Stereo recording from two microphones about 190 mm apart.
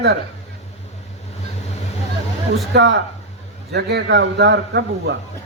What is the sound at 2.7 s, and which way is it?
A man's voice, 70° right (ahead or behind).